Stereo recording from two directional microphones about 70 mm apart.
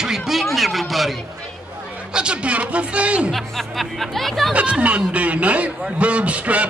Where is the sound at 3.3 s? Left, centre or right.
Centre.